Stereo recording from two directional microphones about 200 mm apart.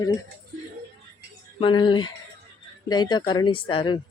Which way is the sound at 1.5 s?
25° left (ahead or behind).